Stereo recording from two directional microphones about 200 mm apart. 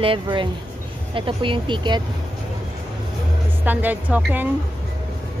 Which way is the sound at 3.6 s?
10° right (ahead or behind).